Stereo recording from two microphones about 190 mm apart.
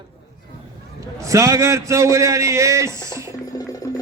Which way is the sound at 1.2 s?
15° right (ahead or behind).